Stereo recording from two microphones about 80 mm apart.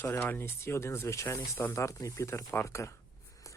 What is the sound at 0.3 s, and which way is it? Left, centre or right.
Speech, left.